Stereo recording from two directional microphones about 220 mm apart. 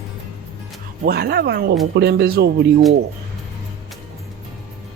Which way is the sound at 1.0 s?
45° right (ahead or behind).